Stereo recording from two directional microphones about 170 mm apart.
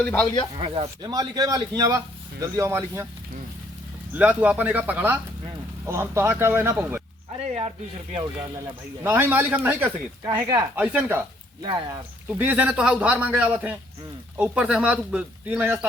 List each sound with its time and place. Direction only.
0.0 s speech: 10° left (ahead or behind)
0.5 s speech: 35° right (ahead or behind)
1.0 s a man's voice: 20° right (ahead or behind)
4.1 s speech: 10° right (ahead or behind)
7.3 s speech: 40° right (ahead or behind)
9.0 s speech: 10° right (ahead or behind)
10.2 s a man's voice: 20° right (ahead or behind)
10.8 s speech: 10° right (ahead or behind)
11.6 s a man's voice: 25° right (ahead or behind)
12.3 s speech: 10° right (ahead or behind)